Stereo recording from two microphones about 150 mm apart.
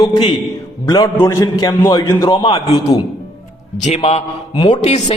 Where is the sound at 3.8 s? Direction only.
45° left (ahead or behind).